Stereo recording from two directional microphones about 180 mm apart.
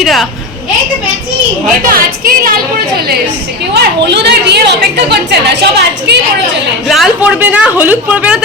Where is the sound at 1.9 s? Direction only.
55° right (ahead or behind).